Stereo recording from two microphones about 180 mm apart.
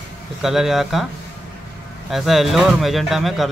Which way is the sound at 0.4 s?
Centre (ahead or behind).